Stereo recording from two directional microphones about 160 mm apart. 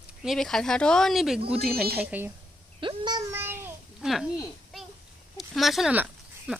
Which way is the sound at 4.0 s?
Centre (ahead or behind).